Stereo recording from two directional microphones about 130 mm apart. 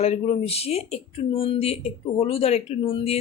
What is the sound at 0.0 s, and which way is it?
Speech, 55° left (ahead or behind).